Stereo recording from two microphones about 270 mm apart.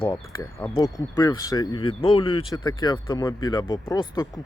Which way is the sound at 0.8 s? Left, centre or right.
Centre.